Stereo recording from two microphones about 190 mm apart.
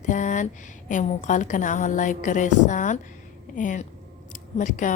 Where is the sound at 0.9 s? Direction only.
40° left (ahead or behind).